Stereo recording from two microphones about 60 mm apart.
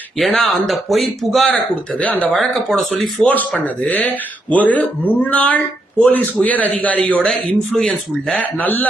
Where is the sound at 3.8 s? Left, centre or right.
Left.